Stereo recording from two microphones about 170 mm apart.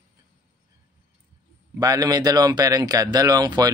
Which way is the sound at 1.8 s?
20° right (ahead or behind).